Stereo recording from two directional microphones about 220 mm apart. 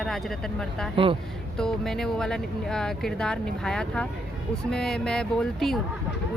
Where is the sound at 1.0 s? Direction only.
25° right (ahead or behind).